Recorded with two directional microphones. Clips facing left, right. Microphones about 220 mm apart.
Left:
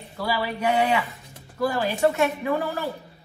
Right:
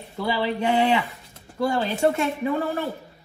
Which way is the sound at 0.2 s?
25° right (ahead or behind).